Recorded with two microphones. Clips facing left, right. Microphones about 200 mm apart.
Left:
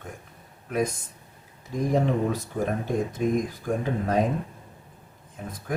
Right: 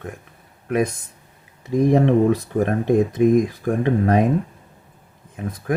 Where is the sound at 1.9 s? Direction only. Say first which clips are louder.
Right 7 dB; 65° right (ahead or behind).